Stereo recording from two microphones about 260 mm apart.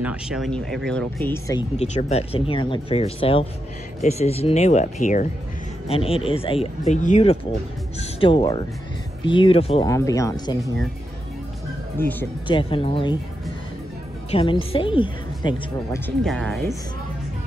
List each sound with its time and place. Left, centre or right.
0.0 s speech: centre
12.0 s speech: centre
12.4 s speech: centre
14.3 s speech: left
16.3 s speech: centre